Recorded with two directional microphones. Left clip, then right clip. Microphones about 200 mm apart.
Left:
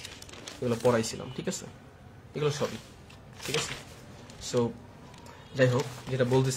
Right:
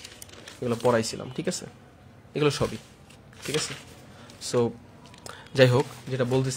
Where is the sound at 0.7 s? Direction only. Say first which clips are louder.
Right 2 dB; 25° right (ahead or behind).